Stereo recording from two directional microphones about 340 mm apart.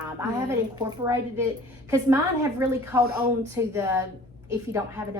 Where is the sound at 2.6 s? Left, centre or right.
Centre.